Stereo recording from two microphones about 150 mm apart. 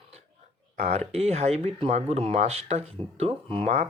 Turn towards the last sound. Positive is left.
turn(degrees=-45)  # may be behind; listen again after turning